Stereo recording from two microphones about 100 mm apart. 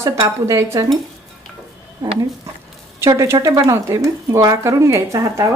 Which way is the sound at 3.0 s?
30° right (ahead or behind).